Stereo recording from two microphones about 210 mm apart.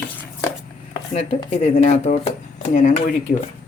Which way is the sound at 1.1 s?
30° left (ahead or behind).